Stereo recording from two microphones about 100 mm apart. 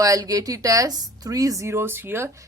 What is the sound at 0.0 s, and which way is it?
A woman's voice, 35° right (ahead or behind).